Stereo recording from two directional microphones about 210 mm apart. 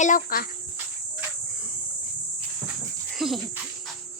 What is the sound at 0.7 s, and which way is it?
Cricket, 10° right (ahead or behind).